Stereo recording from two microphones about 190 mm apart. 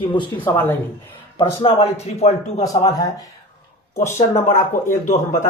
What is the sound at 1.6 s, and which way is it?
Speech, 30° left (ahead or behind).